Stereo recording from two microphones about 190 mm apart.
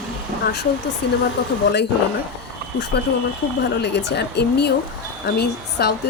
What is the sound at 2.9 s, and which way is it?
Speech, 60° left (ahead or behind).